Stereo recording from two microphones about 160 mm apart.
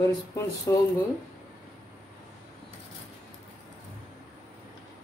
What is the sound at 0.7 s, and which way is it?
Speech, 20° left (ahead or behind).